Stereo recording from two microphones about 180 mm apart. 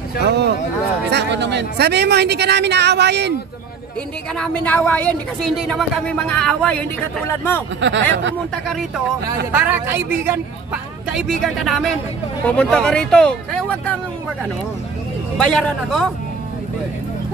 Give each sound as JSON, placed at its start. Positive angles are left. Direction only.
{"t": 0.2, "sound": "speech", "side_deg": -70}
{"t": 4.4, "sound": "speech", "side_deg": 10}
{"t": 7.8, "sound": "speech", "side_deg": -90}
{"t": 8.6, "sound": "speech", "side_deg": 0}
{"t": 15.3, "sound": "speech", "side_deg": 5}